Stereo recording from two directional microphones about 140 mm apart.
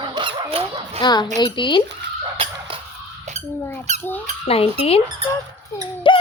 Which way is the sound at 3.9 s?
55° right (ahead or behind).